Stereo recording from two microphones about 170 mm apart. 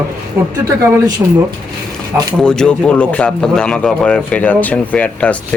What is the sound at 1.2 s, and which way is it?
Speech, 20° right (ahead or behind).